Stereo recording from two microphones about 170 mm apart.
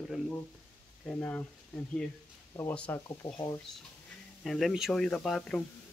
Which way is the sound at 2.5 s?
10° left (ahead or behind).